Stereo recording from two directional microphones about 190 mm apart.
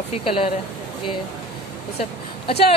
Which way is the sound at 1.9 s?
30° left (ahead or behind).